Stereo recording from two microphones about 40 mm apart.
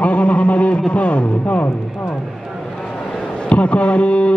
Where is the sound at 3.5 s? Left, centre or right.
Left.